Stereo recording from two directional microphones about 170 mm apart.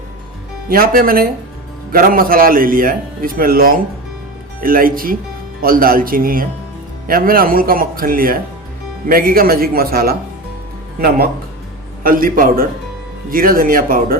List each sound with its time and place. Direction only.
0.7 s a man's voice: 55° right (ahead or behind)
12.0 s a man's voice: 55° right (ahead or behind)